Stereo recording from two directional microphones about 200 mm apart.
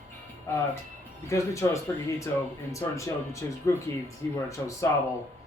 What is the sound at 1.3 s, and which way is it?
Speech, 15° left (ahead or behind).